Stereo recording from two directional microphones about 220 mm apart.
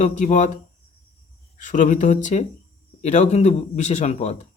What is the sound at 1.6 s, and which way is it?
Speech, 35° left (ahead or behind).